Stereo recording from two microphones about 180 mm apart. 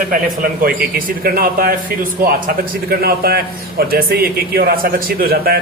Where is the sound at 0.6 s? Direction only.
50° right (ahead or behind).